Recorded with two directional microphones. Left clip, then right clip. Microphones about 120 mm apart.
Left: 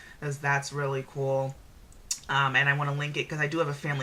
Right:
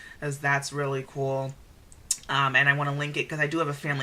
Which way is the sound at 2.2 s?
30° right (ahead or behind).